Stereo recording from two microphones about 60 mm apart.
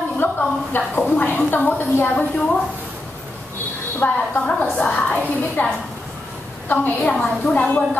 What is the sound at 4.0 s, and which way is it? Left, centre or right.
A woman's voice, left.